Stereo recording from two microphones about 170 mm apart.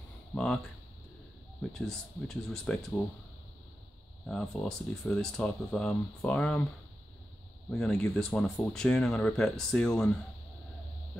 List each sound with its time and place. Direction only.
0.3 s a sound: 5° left (ahead or behind)
1.6 s speech: 5° left (ahead or behind)
4.3 s speech: 5° left (ahead or behind)
7.7 s speech: 5° left (ahead or behind)